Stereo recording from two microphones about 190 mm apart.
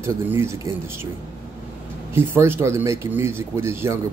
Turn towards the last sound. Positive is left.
turn(degrees=-15)  # may be behind; listen again after turning